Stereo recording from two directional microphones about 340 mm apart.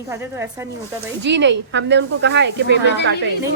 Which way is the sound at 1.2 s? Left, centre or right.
Right.